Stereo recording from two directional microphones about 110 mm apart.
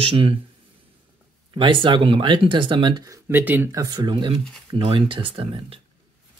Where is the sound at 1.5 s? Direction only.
50° right (ahead or behind).